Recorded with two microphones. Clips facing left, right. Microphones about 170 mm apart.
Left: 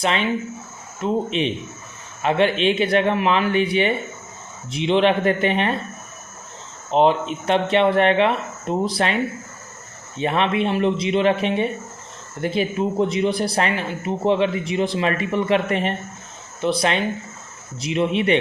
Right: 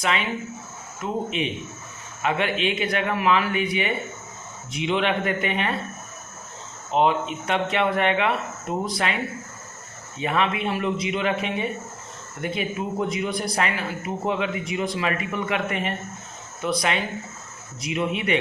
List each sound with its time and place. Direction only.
0.0 s speech: 30° left (ahead or behind)
6.9 s speech: 30° left (ahead or behind)
10.2 s speech: 30° left (ahead or behind)